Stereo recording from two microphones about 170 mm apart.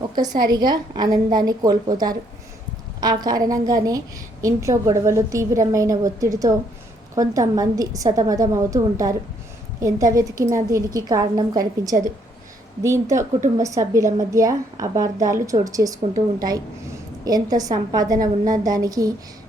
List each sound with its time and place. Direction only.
0.2 s a woman's voice: 25° right (ahead or behind)